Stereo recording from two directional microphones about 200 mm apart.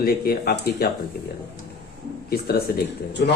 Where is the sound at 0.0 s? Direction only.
50° left (ahead or behind).